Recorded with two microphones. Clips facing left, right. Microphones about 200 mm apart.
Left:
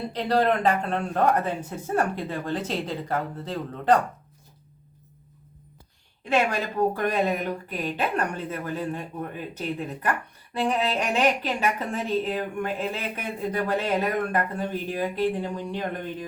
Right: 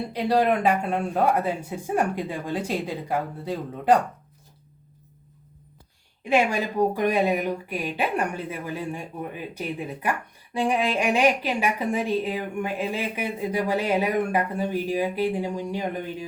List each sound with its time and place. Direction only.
0.1 s speech: 10° right (ahead or behind)
6.2 s speech: 10° right (ahead or behind)